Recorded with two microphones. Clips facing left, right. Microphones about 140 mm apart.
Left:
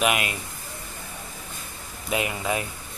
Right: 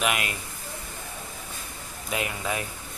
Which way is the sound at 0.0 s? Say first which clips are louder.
Left 3 dB; 10° left (ahead or behind).